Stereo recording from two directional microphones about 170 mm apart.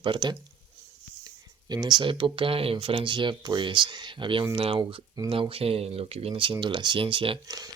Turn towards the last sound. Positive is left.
turn(degrees=-20)  # may be behind; listen again after turning